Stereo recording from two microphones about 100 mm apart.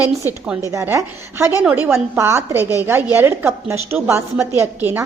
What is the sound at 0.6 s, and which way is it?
A woman's voice, 30° right (ahead or behind).